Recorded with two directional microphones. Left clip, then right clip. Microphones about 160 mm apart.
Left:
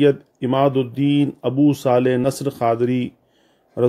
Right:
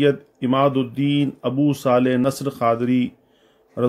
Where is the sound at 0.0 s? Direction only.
30° left (ahead or behind).